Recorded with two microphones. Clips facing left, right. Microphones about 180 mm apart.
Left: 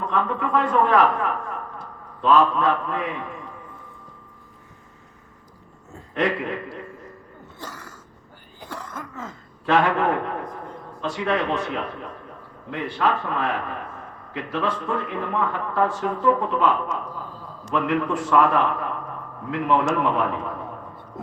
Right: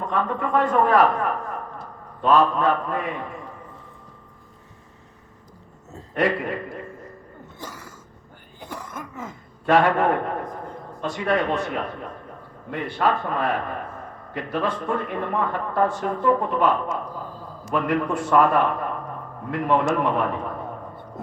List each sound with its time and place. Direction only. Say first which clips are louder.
0.0 s a man's voice: even; 45° right (ahead or behind)
6.0 s speech: right 1 dB; 40° right (ahead or behind)
7.6 s a sound: even; 10° right (ahead or behind)
8.7 s throat clearing: even; 10° right (ahead or behind)
9.6 s a man's voice: right 2 dB; 40° right (ahead or behind)